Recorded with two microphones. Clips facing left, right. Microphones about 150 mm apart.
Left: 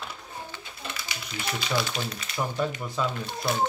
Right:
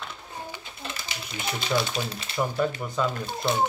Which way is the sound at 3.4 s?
25° right (ahead or behind).